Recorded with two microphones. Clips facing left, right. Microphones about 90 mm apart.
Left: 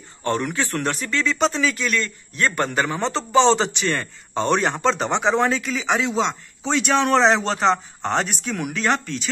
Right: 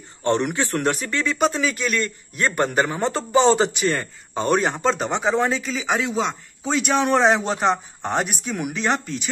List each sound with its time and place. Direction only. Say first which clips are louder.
0.2 s a man's voice: right 2 dB; 20° right (ahead or behind)